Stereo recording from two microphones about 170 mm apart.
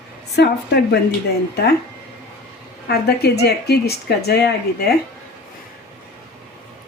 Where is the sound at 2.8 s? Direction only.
70° left (ahead or behind).